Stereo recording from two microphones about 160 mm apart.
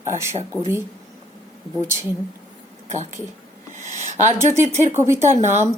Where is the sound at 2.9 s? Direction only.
45° right (ahead or behind).